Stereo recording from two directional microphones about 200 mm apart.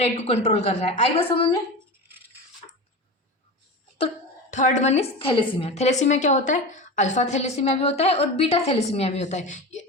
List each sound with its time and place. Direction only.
0.0 s a woman's voice: 35° left (ahead or behind)
4.5 s a woman's voice: 40° left (ahead or behind)